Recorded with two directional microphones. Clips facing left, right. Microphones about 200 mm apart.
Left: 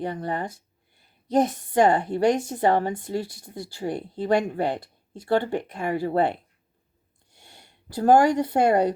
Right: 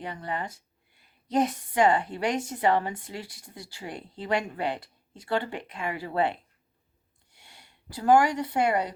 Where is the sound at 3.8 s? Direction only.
35° left (ahead or behind).